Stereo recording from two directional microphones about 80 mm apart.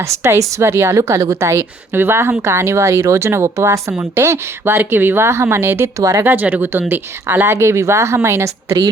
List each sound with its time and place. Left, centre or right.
0.0 s speech: right
6.0 s speech: right
6.2 s speech: right